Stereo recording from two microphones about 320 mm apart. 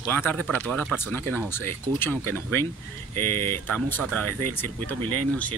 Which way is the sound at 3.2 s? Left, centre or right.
Right.